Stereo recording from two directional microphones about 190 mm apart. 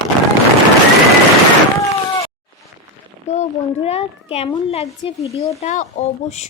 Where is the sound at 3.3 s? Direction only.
35° left (ahead or behind).